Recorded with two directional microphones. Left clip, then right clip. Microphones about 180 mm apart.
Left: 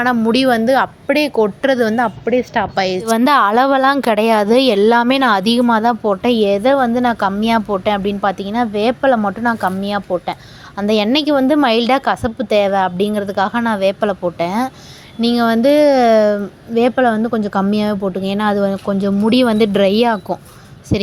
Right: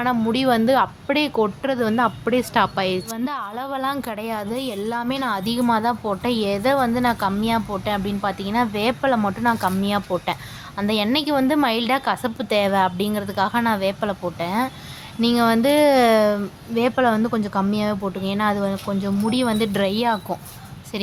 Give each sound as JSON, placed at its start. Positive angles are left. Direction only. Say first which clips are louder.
{"t": 0.0, "sound": "a woman's voice", "louder": "left 6 dB", "side_deg": 25}
{"t": 3.2, "sound": "a woman's voice", "louder": "left 16 dB", "side_deg": 55}
{"t": 17.5, "sound": "a woman's voice", "louder": "left 5 dB", "side_deg": 30}